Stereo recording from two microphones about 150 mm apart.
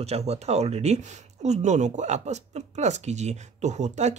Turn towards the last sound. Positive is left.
turn(degrees=-50)  # may be behind; listen again after turning